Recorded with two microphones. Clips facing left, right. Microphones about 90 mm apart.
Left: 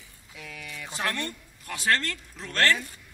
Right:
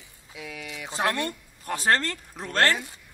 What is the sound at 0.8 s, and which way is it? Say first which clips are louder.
A man's voice: right 5 dB; 35° right (ahead or behind).